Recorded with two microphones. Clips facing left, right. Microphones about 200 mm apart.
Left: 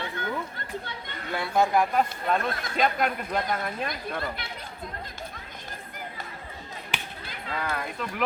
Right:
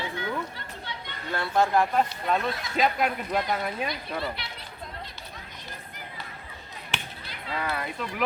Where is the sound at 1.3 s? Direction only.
5° left (ahead or behind).